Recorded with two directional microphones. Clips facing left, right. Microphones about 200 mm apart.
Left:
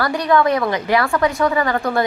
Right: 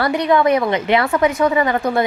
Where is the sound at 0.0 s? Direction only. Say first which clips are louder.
Right 1 dB; 20° right (ahead or behind).